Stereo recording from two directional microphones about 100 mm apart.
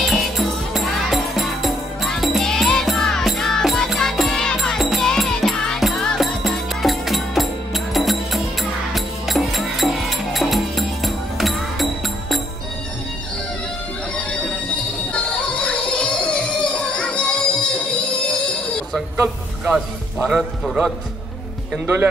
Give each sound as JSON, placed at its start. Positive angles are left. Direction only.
{"t": 0.0, "sound": "music", "side_deg": 0}
{"t": 15.1, "sound": "music", "side_deg": 10}
{"t": 19.1, "sound": "a sound", "side_deg": -20}
{"t": 20.2, "sound": "music", "side_deg": -5}
{"t": 21.8, "sound": "music", "side_deg": -20}